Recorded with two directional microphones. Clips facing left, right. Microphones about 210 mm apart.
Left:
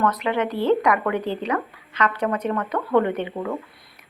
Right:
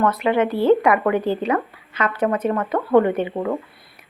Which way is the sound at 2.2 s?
30° right (ahead or behind).